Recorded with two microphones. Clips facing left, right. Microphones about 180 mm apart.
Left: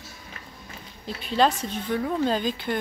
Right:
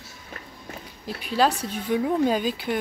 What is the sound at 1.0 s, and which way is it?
A woman's voice, 5° right (ahead or behind).